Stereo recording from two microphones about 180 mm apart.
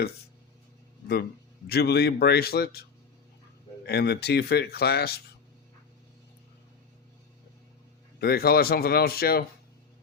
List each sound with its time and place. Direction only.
1.0 s a man's voice: 60° left (ahead or behind)
3.8 s a man's voice: 65° left (ahead or behind)
8.2 s a man's voice: 60° left (ahead or behind)